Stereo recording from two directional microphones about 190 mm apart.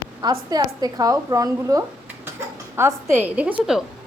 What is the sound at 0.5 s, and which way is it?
A woman's voice, 20° right (ahead or behind).